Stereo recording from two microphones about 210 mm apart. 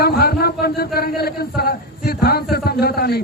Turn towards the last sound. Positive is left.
turn(degrees=45)  # may be behind; listen again after turning